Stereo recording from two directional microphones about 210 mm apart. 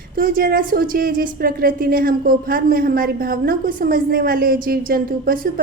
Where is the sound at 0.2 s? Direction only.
45° right (ahead or behind).